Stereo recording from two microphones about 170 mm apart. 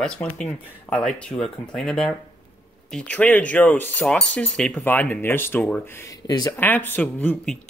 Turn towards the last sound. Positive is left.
turn(degrees=5)  # may be behind; listen again after turning